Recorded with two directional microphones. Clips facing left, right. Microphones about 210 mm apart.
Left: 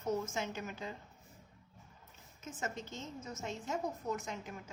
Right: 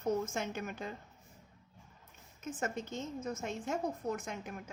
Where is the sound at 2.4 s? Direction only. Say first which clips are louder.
Right 4 dB; 55° right (ahead or behind).